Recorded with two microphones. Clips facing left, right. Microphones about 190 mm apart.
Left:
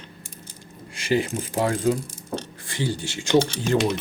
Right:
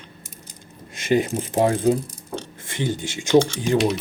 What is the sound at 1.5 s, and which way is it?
Speech, 20° right (ahead or behind).